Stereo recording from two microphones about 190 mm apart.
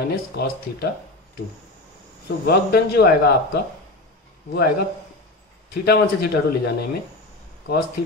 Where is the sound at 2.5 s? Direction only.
55° left (ahead or behind).